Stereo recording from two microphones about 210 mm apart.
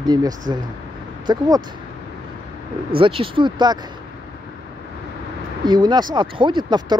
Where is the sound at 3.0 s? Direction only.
25° right (ahead or behind).